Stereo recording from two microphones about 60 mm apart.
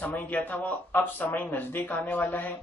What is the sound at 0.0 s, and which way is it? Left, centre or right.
Speech, left.